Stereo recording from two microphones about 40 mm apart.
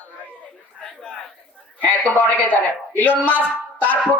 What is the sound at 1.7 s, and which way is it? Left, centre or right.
Speech, left.